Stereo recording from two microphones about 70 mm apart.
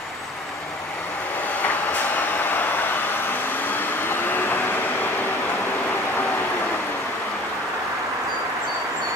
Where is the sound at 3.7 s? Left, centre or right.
Left.